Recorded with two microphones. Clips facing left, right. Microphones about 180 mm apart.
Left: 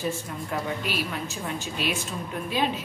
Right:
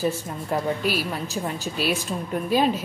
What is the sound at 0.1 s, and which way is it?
A woman's voice, 35° right (ahead or behind).